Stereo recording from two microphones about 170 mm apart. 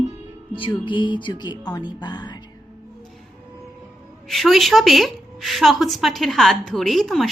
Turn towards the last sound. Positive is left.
turn(degrees=0)  # may be behind; listen again after turning